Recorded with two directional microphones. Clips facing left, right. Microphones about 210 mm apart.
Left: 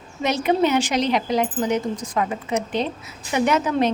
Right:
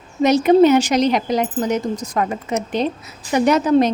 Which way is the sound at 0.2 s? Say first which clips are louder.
Right 8 dB; 40° right (ahead or behind).